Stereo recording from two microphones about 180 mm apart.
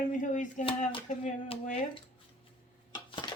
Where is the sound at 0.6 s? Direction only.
30° left (ahead or behind).